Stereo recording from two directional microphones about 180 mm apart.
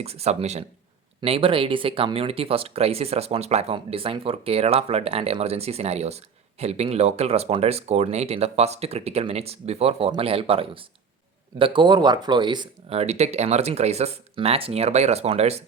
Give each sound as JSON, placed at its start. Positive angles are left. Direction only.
{"t": 0.0, "sound": "speech", "side_deg": -35}